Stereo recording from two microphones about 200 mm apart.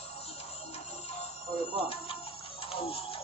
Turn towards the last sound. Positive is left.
turn(degrees=30)  # may be behind; listen again after turning